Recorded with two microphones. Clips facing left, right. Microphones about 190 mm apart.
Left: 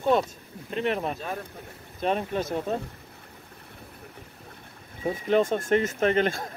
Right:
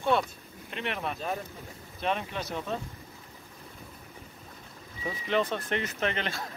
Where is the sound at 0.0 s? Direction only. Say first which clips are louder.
Left 4 dB; 40° left (ahead or behind).